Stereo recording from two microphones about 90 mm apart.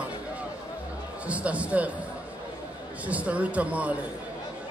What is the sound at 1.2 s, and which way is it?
Speech, 15° right (ahead or behind).